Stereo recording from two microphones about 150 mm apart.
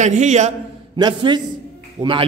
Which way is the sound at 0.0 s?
50° right (ahead or behind).